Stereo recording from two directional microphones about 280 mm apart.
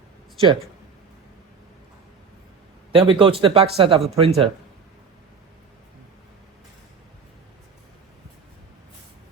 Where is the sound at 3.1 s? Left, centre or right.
Centre.